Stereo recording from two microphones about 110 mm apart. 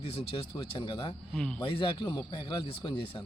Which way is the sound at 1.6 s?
50° left (ahead or behind).